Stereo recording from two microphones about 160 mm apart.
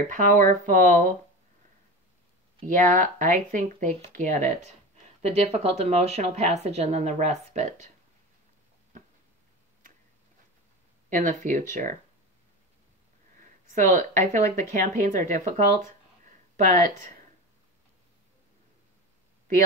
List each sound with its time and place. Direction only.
0.1 s speech: 60° right (ahead or behind)
2.6 s a woman's voice: 55° right (ahead or behind)
5.2 s a woman's voice: 40° right (ahead or behind)
11.1 s speech: 55° right (ahead or behind)
14.3 s a woman's voice: 45° right (ahead or behind)
16.3 s a sound: 55° right (ahead or behind)